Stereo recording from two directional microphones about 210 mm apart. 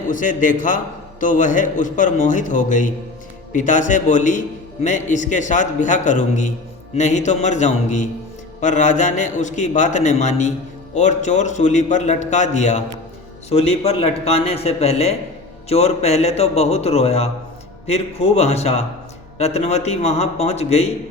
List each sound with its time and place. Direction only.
0.1 s a man's voice: 40° left (ahead or behind)